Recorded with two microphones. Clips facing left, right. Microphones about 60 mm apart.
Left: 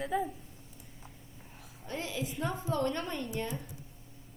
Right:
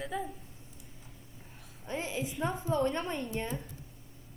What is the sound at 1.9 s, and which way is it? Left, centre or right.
Speech, right.